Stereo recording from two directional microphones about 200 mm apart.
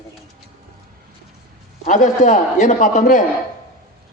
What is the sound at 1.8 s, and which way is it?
A man's voice, 40° left (ahead or behind).